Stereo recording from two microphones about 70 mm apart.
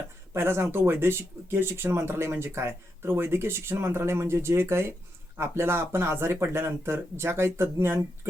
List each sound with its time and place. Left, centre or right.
0.3 s speech: right